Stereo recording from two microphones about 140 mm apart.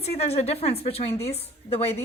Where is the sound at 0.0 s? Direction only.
50° left (ahead or behind).